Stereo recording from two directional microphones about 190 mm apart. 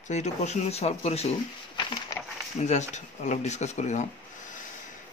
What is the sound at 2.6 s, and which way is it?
Speech, 40° left (ahead or behind).